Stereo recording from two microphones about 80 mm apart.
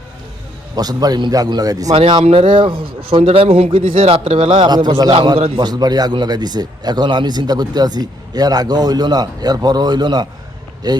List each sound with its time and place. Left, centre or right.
0.8 s a man's voice: right
2.0 s a man's voice: right